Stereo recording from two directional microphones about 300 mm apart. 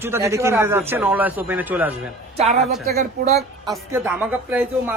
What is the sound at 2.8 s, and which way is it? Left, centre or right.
Speech, right.